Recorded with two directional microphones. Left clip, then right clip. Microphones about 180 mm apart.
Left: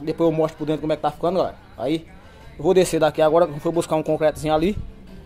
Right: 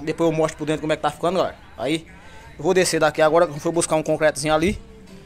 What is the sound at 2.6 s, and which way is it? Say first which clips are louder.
Speech: left 1 dB; 20° left (ahead or behind).